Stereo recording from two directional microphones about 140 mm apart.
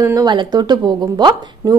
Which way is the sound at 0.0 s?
25° right (ahead or behind).